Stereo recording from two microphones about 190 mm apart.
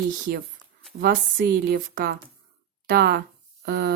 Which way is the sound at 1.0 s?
50° right (ahead or behind).